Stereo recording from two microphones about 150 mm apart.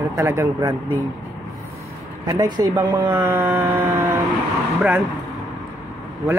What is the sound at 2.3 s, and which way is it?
Speech, 25° right (ahead or behind).